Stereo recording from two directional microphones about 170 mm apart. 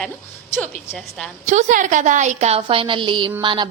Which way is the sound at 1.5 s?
45° right (ahead or behind).